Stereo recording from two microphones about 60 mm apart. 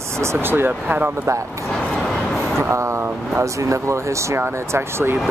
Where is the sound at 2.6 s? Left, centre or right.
Right.